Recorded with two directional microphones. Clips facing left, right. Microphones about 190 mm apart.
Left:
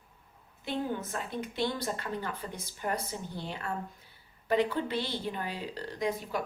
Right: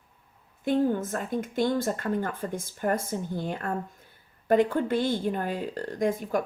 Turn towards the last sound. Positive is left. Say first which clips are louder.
# right 6 dB
turn(degrees=-50)  # may be behind; listen again after turning